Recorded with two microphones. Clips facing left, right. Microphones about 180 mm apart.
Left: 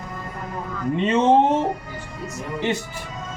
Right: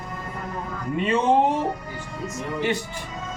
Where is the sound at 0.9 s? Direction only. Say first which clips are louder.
Left 3 dB; 25° left (ahead or behind).